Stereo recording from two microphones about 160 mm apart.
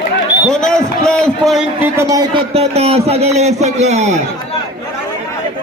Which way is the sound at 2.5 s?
40° right (ahead or behind).